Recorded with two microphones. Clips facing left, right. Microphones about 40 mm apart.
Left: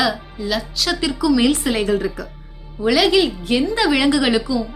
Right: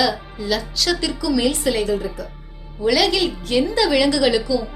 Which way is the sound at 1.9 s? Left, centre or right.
Left.